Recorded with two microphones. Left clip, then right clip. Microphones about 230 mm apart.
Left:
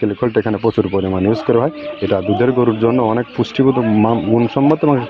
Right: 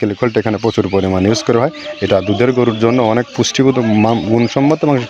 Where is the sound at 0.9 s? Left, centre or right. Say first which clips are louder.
Right 3 dB; right.